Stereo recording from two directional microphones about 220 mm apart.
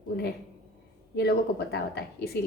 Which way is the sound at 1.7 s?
45° left (ahead or behind).